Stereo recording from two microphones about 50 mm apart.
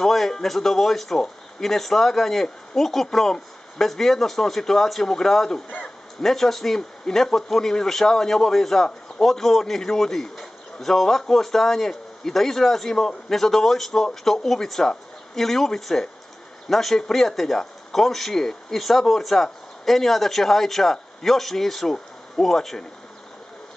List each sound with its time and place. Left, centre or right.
0.0 s a man's voice: centre